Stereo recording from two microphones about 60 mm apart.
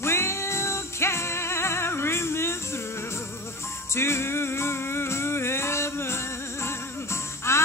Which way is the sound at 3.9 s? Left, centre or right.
Left.